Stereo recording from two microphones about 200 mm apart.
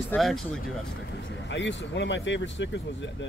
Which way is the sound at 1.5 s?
65° left (ahead or behind).